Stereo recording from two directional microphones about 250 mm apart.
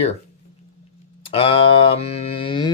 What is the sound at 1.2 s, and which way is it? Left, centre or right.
Mantra, left.